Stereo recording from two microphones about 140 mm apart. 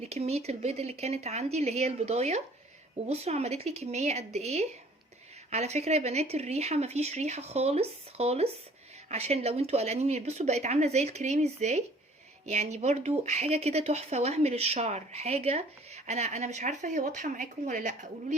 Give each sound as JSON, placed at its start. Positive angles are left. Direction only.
{"t": 0.1, "sound": "a woman's voice", "side_deg": -50}